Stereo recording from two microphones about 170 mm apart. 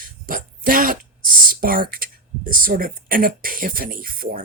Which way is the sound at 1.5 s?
55° right (ahead or behind).